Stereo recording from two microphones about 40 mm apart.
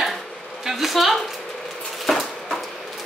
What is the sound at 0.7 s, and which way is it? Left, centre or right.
Speech, centre.